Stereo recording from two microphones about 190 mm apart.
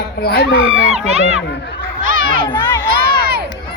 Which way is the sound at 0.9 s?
35° right (ahead or behind).